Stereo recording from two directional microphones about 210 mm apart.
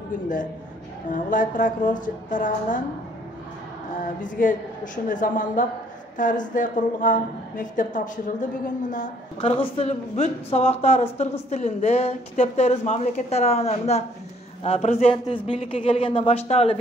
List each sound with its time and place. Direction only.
1.1 s speech: 40° left (ahead or behind)
4.2 s a man's voice: 40° left (ahead or behind)